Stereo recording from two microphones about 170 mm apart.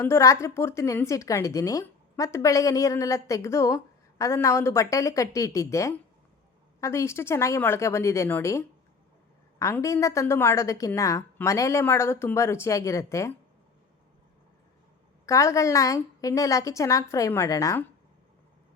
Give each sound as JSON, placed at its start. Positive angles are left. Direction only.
{"t": 0.0, "sound": "a woman's voice", "side_deg": 15}
{"t": 15.3, "sound": "a woman's voice", "side_deg": 20}